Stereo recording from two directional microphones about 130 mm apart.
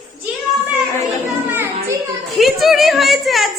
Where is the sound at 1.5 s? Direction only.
20° right (ahead or behind).